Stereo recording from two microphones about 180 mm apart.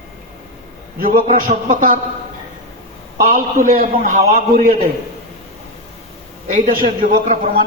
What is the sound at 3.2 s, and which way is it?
A man's voice, 50° right (ahead or behind).